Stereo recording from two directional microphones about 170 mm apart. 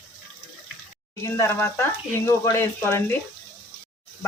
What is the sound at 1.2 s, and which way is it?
Speech, 15° left (ahead or behind).